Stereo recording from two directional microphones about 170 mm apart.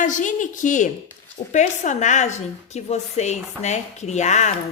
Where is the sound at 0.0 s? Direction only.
50° left (ahead or behind).